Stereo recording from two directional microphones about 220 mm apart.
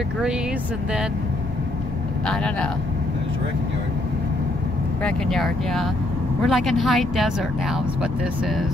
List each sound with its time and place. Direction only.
2.2 s speech: 5° left (ahead or behind)
5.0 s speech: centre (ahead or behind)